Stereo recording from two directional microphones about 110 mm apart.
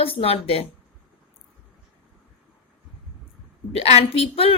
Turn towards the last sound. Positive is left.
turn(degrees=60)  # may be behind; listen again after turning